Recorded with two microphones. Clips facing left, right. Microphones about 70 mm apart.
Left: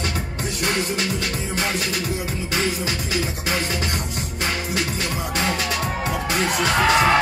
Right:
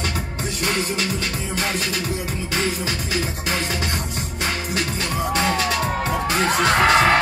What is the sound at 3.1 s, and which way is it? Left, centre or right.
Music, right.